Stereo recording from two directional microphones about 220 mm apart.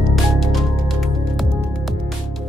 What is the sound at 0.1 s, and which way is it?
Music, centre (ahead or behind).